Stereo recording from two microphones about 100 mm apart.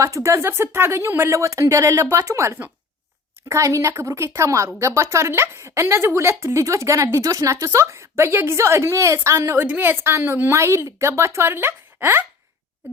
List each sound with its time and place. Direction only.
0.0 s a woman's voice: 30° right (ahead or behind)
9.6 s a woman's voice: 20° right (ahead or behind)